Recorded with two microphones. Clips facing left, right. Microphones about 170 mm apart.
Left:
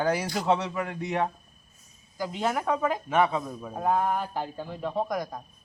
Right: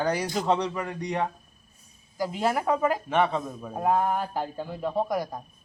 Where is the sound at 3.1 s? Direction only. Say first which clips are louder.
Even; 5° left (ahead or behind).